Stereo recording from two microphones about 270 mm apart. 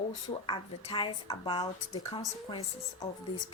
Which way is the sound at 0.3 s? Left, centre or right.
Centre.